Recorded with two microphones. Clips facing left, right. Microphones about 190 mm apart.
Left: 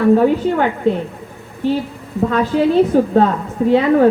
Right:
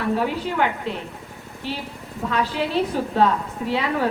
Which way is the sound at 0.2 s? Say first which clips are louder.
Left 9 dB; 45° left (ahead or behind).